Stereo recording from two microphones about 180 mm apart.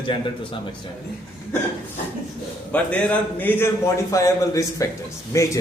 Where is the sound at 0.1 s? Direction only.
30° left (ahead or behind).